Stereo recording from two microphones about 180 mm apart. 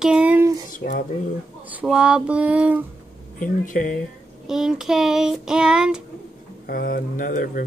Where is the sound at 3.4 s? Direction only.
50° left (ahead or behind).